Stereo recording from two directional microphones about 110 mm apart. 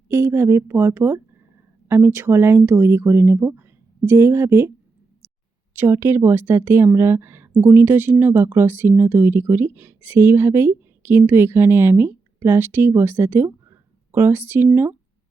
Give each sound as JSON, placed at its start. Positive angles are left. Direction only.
{"t": 0.1, "sound": "speech", "side_deg": -25}
{"t": 5.7, "sound": "speech", "side_deg": -20}